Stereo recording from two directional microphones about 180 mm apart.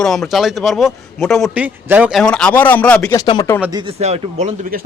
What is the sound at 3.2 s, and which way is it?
Speech, 20° left (ahead or behind).